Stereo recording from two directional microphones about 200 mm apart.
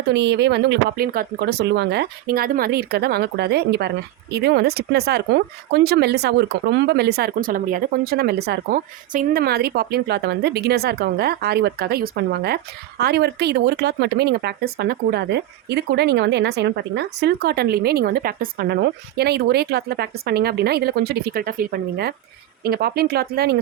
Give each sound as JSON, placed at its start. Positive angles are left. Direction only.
{"t": 0.1, "sound": "speech", "side_deg": -60}